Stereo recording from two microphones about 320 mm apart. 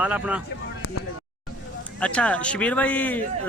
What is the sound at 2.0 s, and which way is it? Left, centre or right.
Speech, centre.